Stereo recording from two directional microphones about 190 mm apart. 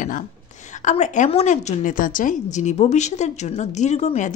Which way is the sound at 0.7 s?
40° left (ahead or behind).